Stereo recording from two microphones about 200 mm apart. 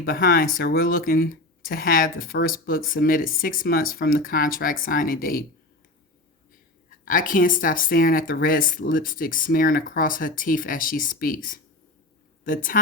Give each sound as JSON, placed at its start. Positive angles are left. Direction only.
{"t": 0.0, "sound": "speech", "side_deg": 45}
{"t": 6.9, "sound": "speech", "side_deg": 45}